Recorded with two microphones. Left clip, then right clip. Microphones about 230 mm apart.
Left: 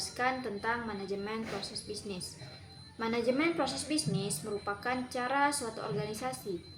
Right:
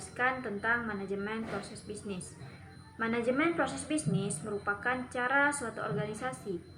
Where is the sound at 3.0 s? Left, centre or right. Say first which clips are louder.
Even; centre.